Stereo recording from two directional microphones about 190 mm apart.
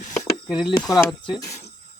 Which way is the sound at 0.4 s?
5° right (ahead or behind).